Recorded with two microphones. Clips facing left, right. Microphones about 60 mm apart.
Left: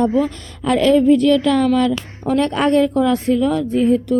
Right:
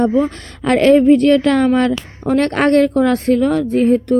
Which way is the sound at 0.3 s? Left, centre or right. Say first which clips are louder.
Right 3 dB; right.